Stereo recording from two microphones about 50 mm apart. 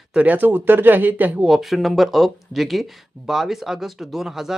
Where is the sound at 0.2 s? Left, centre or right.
Right.